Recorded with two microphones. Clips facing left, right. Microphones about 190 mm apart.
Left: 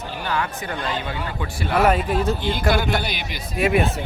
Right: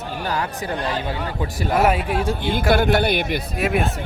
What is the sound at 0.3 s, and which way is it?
Speech, 35° right (ahead or behind).